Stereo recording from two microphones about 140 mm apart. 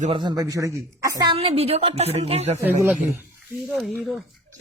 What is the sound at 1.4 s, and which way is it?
A woman's voice, 45° right (ahead or behind).